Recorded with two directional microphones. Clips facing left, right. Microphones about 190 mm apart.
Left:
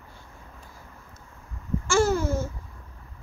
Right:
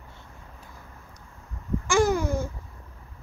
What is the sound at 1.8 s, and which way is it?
Babbling, 15° right (ahead or behind).